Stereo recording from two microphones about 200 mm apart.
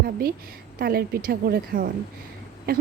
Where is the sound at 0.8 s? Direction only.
50° right (ahead or behind).